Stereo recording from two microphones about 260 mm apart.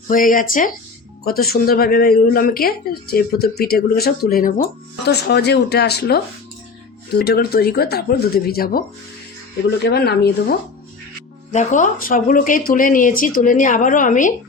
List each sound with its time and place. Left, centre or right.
0.1 s speech: left